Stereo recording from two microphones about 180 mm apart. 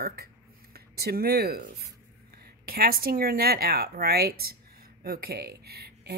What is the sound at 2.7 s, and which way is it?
Speech, 55° right (ahead or behind).